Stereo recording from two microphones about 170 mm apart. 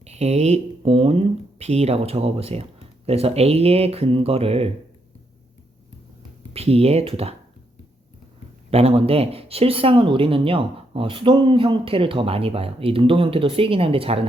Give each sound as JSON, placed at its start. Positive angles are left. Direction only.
{"t": 0.0, "sound": "speech", "side_deg": -40}
{"t": 6.5, "sound": "speech", "side_deg": -35}
{"t": 8.7, "sound": "speech", "side_deg": -35}